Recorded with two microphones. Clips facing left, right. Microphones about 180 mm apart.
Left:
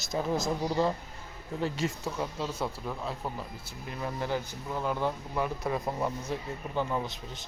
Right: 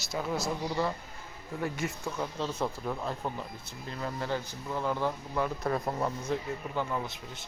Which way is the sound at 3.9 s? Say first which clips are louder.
Left 1 dB; 15° left (ahead or behind).